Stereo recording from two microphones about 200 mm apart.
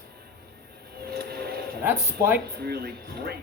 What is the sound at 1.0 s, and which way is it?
Vehicle, 50° right (ahead or behind).